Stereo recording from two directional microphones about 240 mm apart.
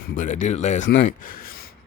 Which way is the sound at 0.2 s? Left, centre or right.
Left.